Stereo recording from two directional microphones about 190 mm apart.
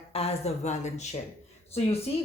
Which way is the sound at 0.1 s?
30° left (ahead or behind).